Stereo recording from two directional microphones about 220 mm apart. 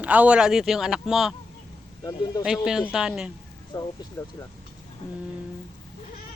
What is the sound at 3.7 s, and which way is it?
Speech, 20° left (ahead or behind).